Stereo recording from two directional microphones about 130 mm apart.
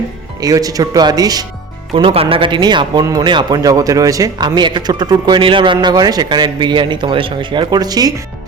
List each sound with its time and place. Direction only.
0.3 s speech: 30° right (ahead or behind)
2.0 s speech: 45° right (ahead or behind)